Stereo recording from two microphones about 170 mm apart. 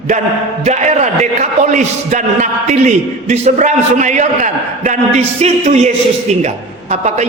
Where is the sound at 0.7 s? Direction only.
45° right (ahead or behind).